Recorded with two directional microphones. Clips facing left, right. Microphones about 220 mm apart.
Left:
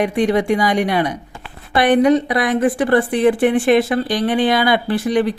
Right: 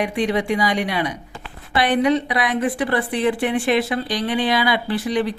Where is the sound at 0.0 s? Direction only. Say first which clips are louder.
Left 5 dB; 45° left (ahead or behind).